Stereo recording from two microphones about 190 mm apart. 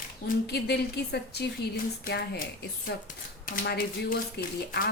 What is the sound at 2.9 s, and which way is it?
Speech, 60° left (ahead or behind).